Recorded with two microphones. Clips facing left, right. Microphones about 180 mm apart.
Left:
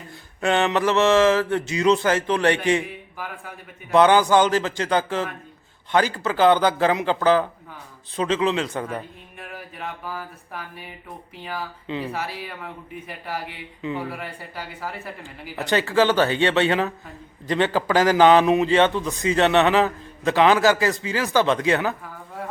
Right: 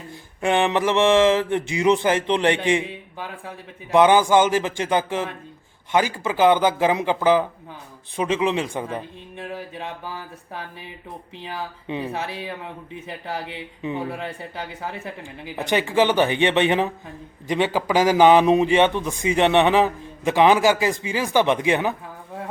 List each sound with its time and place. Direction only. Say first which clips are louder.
0.4 s speech: even; 15° right (ahead or behind)
3.9 s speech: right 1 dB; 15° right (ahead or behind)
9.4 s speech: right 3 dB; 25° right (ahead or behind)